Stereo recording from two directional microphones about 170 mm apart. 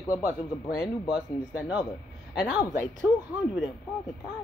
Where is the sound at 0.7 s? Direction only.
25° left (ahead or behind).